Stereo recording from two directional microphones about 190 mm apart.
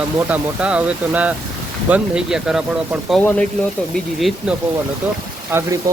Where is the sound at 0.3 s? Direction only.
5° right (ahead or behind).